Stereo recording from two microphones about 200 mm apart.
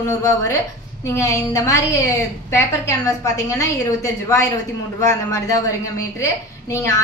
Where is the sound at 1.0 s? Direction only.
15° left (ahead or behind).